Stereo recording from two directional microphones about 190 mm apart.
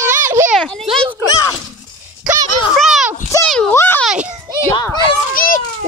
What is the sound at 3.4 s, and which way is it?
Speech, 5° left (ahead or behind).